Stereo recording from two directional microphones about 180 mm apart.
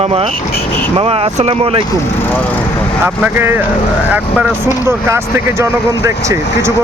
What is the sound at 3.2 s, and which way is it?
Speech, 10° right (ahead or behind).